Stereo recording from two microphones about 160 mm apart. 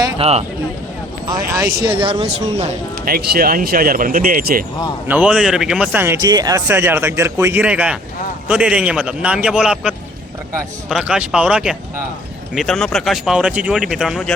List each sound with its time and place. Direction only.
0.2 s speech: 40° right (ahead or behind)
1.5 s speech: 20° right (ahead or behind)
1.9 s speech: 35° right (ahead or behind)
3.0 s speech: 70° right (ahead or behind)
5.0 s speech: 10° right (ahead or behind)